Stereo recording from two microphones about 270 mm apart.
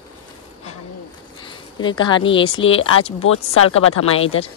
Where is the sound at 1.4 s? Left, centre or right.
Centre.